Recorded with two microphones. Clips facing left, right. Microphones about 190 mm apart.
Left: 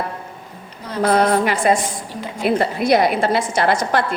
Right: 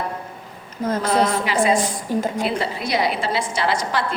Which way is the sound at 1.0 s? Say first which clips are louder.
Left 7 dB; 55° left (ahead or behind).